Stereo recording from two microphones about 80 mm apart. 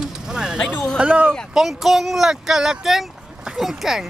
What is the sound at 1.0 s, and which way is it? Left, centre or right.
Speech, centre.